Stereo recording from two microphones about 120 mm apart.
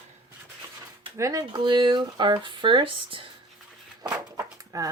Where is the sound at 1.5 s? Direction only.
40° right (ahead or behind).